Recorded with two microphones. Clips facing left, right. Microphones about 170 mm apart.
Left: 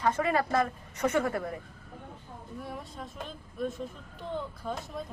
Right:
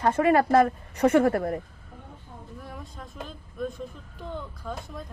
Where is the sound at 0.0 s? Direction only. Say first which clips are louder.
Right 6 dB; 55° right (ahead or behind).